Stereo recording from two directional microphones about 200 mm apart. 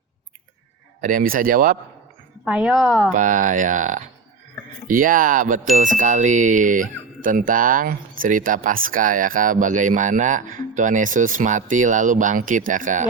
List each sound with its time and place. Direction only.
1.0 s speech: 45° right (ahead or behind)
2.4 s a woman's voice: 5° right (ahead or behind)
3.1 s speech: 40° right (ahead or behind)